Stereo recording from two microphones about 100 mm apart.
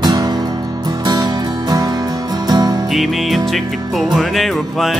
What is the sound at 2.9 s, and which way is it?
Music, centre (ahead or behind).